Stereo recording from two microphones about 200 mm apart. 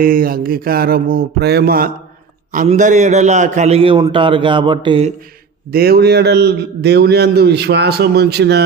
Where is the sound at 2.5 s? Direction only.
35° right (ahead or behind).